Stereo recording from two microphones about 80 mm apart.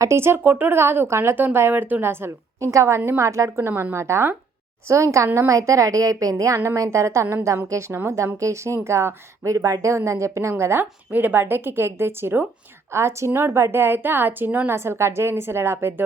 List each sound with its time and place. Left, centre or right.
0.0 s a woman's voice: right